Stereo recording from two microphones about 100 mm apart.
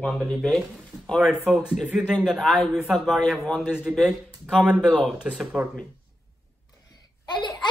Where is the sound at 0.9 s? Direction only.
20° right (ahead or behind).